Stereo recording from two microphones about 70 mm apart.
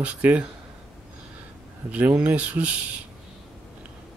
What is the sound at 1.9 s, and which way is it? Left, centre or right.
Speech, right.